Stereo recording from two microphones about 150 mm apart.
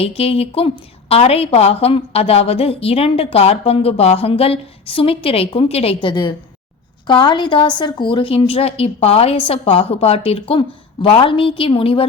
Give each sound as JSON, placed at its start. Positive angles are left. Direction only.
{"t": 0.0, "sound": "a woman's voice", "side_deg": 40}